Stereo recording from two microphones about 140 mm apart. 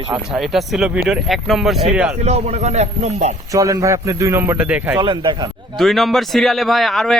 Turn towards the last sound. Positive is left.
turn(degrees=0)  # may be behind; listen again after turning